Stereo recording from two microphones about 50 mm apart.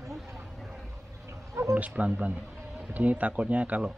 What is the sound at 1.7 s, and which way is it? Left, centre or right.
Speech, right.